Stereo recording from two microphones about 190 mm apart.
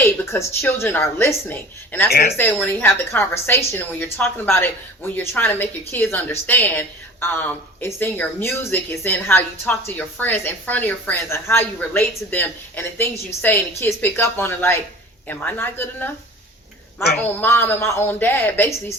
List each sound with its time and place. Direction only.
0.0 s a woman's voice: 15° left (ahead or behind)
2.0 s speech: 55° left (ahead or behind)
2.4 s a woman's voice: 10° left (ahead or behind)
17.2 s a woman's voice: 10° left (ahead or behind)